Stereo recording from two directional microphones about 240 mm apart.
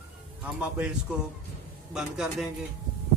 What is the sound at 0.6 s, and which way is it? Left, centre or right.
A man's voice, centre.